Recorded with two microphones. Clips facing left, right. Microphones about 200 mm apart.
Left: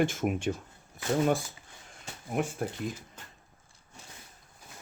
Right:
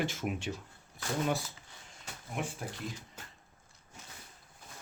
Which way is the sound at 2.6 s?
55° left (ahead or behind).